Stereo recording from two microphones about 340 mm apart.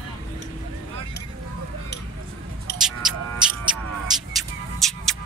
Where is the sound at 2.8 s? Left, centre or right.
Centre.